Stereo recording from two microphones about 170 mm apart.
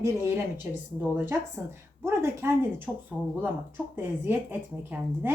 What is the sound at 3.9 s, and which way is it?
Speech, 10° right (ahead or behind).